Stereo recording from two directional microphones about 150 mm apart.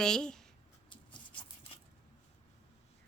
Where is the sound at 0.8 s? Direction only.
35° left (ahead or behind).